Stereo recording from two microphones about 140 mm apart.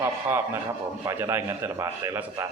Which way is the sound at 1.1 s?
20° right (ahead or behind).